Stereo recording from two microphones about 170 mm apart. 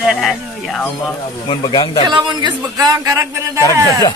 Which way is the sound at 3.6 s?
20° left (ahead or behind).